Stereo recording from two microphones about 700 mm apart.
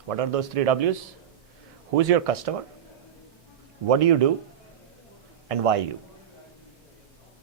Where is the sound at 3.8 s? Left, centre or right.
Right.